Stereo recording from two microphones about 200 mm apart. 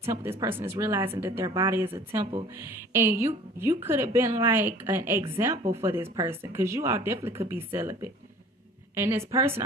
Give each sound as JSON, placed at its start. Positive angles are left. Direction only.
{"t": 0.1, "sound": "speech", "side_deg": -15}